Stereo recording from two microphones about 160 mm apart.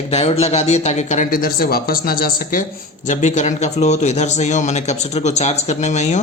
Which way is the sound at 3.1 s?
50° left (ahead or behind).